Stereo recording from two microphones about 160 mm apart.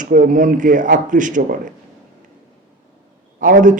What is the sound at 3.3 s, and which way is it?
Speech, 55° right (ahead or behind).